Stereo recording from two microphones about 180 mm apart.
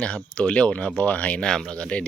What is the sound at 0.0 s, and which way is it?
Speech, 5° left (ahead or behind).